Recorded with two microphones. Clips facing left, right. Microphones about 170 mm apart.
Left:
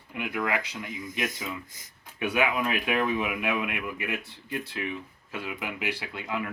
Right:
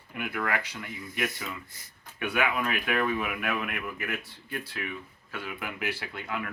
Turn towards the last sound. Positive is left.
turn(degrees=20)  # may be behind; listen again after turning